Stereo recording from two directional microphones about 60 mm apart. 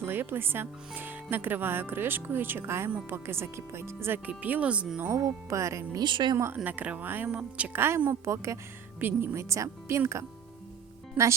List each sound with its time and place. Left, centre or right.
0.0 s speech: right
4.3 s speech: right
5.0 s speech: right
6.7 s speech: right
7.3 s speech: centre
7.7 s speech: right
8.2 s speech: right
9.0 s speech: right
9.3 s speech: right
11.2 s speech: right